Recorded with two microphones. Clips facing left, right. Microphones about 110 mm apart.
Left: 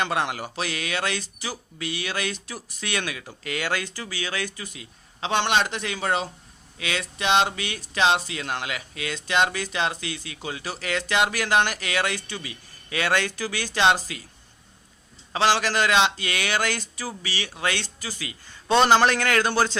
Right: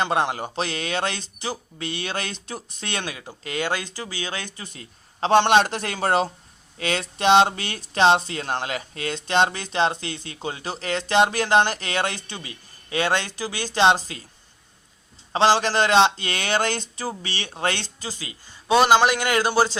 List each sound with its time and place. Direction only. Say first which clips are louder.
0.0 s speech: right 3 dB; 25° right (ahead or behind)
15.3 s speech: right 3 dB; 25° right (ahead or behind)
18.1 s speech: left 1 dB; 20° right (ahead or behind)
18.7 s a man's voice: right 1 dB; 5° right (ahead or behind)